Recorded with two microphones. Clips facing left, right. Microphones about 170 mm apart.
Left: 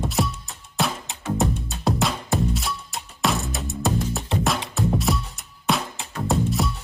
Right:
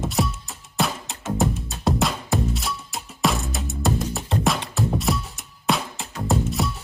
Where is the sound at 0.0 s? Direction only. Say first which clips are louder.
Even; centre (ahead or behind).